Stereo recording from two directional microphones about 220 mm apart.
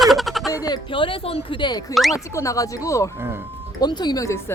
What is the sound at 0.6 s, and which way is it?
Speech, 20° left (ahead or behind).